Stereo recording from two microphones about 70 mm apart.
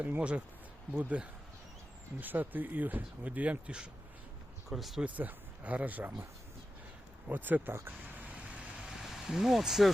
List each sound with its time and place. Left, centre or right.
0.0 s speech: right
4.7 s speech: centre
5.0 s speech: right
7.3 s speech: right
7.9 s vehicle: right
8.9 s speech: centre